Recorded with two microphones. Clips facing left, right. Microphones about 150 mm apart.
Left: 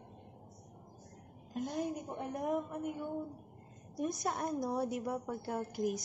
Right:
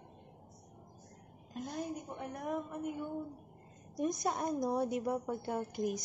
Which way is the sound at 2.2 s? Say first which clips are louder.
Left 4 dB; 15° left (ahead or behind).